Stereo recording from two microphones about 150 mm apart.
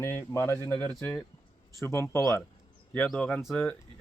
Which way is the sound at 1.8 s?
15° left (ahead or behind).